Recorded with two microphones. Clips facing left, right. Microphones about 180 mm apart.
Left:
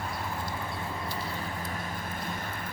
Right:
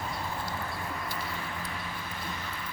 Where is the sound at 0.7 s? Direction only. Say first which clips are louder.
Left 1 dB; 30° left (ahead or behind).